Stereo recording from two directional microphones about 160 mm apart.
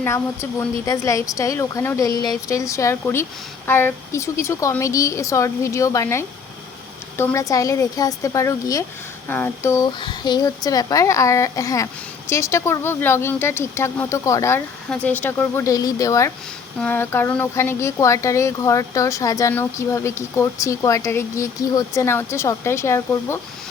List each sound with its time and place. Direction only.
0.9 s a woman's voice: 20° left (ahead or behind)